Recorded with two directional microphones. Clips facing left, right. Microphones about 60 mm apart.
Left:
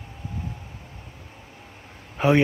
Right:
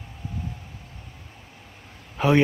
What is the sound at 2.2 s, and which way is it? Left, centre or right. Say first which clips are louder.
Speech: left 1 dB; left.